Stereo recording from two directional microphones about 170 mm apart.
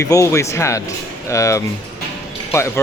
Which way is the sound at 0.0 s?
20° left (ahead or behind).